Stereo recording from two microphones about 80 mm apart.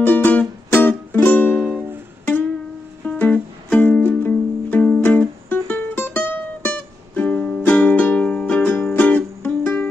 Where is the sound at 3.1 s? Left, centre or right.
Left.